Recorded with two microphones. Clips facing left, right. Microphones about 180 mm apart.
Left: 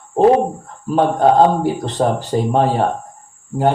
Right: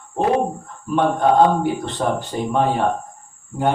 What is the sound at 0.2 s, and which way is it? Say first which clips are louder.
Speech: left 6 dB; 35° left (ahead or behind).